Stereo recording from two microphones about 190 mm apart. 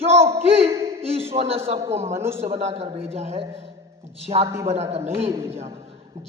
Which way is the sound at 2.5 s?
30° right (ahead or behind).